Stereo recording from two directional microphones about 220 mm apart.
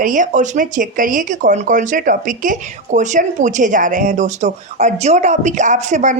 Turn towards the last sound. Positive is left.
turn(degrees=-35)  # may be behind; listen again after turning